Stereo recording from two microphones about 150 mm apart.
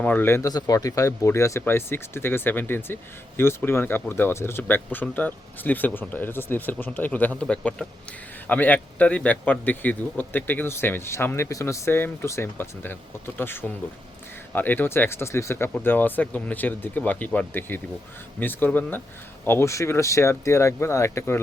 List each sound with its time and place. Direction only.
0.0 s speech: 10° left (ahead or behind)